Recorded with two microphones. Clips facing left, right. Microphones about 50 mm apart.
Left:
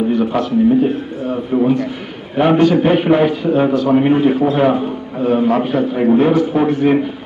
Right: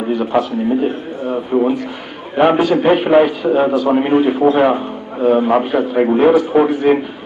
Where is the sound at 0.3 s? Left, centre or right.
Centre.